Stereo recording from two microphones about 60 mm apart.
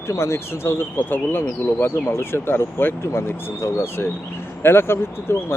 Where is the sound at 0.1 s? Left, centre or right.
Left.